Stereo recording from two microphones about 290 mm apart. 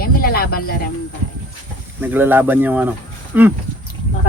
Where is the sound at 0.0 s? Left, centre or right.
Left.